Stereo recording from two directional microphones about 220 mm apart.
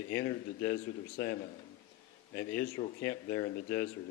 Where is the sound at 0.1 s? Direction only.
15° left (ahead or behind).